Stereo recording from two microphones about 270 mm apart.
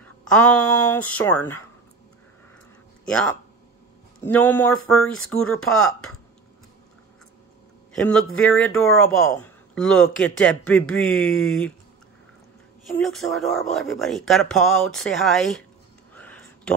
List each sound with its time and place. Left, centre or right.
0.0 s speech: centre
3.1 s speech: centre
7.9 s a man's voice: centre
12.8 s speech: centre
16.2 s a sound: centre